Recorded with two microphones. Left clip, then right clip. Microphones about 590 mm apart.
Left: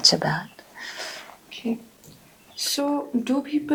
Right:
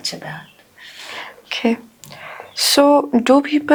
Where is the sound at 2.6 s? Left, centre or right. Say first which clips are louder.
Right 13 dB; right.